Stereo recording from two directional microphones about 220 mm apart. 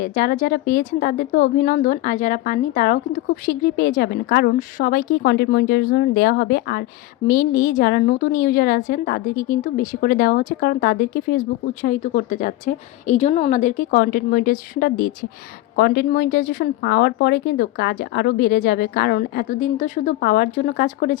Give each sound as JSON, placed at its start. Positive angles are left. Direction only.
{"t": 0.0, "sound": "a woman's voice", "side_deg": 40}